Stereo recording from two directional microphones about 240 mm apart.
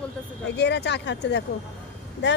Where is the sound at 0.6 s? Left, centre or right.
Left.